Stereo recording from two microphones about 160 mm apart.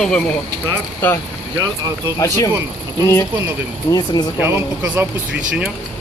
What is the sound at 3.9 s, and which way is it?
Speech, 25° left (ahead or behind).